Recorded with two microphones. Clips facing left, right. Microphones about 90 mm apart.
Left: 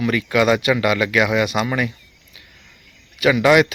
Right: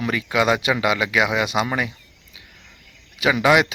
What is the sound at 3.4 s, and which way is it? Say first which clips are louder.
Speech: left 2 dB; 20° right (ahead or behind).